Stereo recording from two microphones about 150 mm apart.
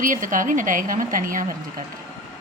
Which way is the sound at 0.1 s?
60° right (ahead or behind).